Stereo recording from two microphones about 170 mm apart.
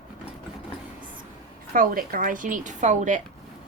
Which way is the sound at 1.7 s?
55° right (ahead or behind).